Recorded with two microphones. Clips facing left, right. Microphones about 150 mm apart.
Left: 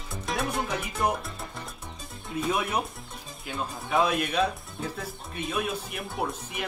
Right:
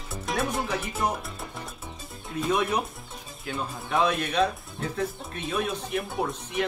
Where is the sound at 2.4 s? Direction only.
5° left (ahead or behind).